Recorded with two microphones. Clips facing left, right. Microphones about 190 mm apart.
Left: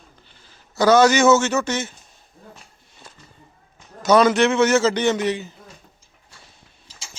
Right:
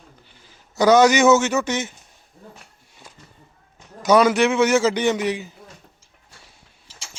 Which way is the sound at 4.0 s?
10° right (ahead or behind).